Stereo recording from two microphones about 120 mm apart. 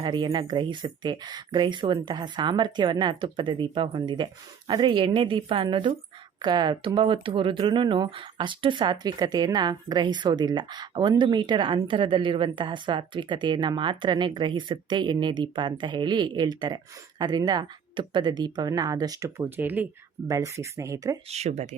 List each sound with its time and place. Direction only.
0.0 s a woman's voice: 40° right (ahead or behind)
19.4 s speech: 15° right (ahead or behind)
20.2 s speech: 30° right (ahead or behind)
21.2 s speech: 65° right (ahead or behind)